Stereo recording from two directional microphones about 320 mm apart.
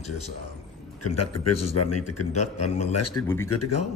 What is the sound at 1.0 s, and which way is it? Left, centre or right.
Speech, left.